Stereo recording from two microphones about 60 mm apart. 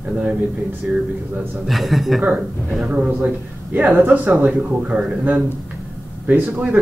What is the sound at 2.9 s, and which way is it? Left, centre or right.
Speech, right.